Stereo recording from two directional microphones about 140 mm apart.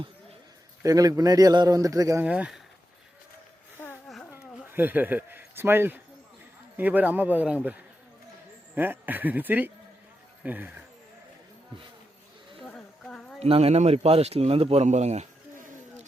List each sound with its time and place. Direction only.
0.8 s speech: 25° right (ahead or behind)
2.2 s speech: 10° right (ahead or behind)
4.3 s a sound: 15° right (ahead or behind)
6.7 s speech: 10° right (ahead or behind)
12.7 s a sound: 5° left (ahead or behind)
13.4 s a man's voice: 45° right (ahead or behind); by 16.0 s 60° right (ahead or behind)